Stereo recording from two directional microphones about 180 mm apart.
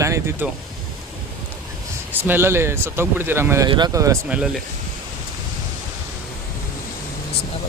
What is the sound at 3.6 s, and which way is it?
Speech, 25° right (ahead or behind).